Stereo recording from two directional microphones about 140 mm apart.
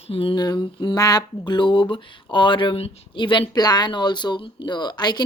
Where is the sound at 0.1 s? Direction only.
40° left (ahead or behind).